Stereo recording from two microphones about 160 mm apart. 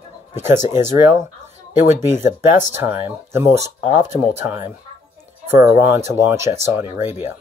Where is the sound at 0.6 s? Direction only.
50° left (ahead or behind).